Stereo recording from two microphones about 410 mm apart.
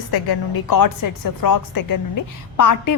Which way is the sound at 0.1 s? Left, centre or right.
Left.